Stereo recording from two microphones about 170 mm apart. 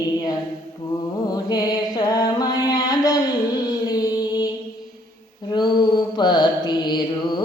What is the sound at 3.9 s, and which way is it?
Music, 20° left (ahead or behind).